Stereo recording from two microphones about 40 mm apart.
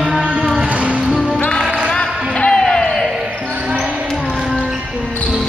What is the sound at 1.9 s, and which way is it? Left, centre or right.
Music, left.